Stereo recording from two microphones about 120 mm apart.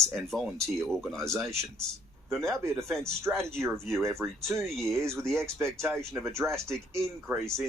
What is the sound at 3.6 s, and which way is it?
Speech, 5° left (ahead or behind).